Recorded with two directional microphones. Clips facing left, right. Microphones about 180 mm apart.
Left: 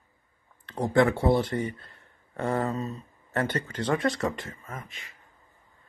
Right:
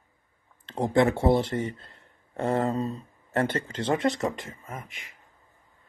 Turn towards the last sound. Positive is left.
turn(degrees=-15)  # may be behind; listen again after turning